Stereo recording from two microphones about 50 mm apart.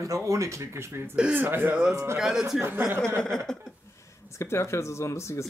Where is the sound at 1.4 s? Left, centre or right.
Right.